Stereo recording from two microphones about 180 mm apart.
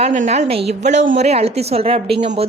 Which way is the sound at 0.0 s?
40° right (ahead or behind).